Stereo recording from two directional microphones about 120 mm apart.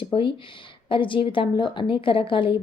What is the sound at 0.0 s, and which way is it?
A woman's voice, 45° left (ahead or behind).